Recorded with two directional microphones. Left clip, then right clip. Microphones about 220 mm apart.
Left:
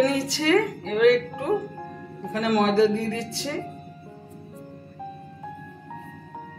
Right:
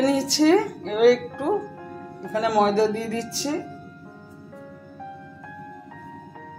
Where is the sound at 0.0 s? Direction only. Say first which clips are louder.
Right 2 dB; 45° right (ahead or behind).